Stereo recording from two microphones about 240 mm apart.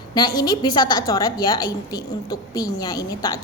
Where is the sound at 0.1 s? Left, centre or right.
Centre.